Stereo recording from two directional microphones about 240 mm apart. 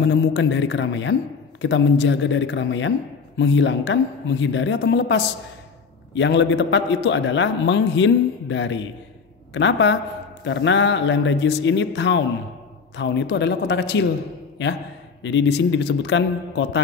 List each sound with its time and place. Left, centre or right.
0.0 s a man's voice: left
15.2 s a man's voice: left